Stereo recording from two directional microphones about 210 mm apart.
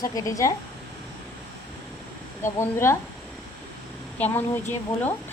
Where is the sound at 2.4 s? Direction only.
10° left (ahead or behind).